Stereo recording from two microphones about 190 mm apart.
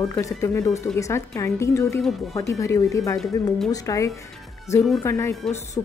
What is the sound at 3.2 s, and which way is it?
Speech, centre (ahead or behind).